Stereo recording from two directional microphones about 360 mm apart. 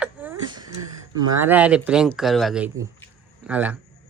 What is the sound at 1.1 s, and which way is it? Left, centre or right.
A man's voice, centre.